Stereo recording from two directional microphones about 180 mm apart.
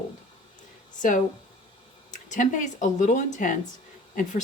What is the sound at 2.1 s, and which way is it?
A woman's voice, 45° left (ahead or behind).